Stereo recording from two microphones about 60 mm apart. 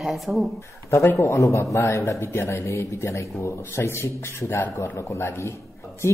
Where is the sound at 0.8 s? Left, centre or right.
Left.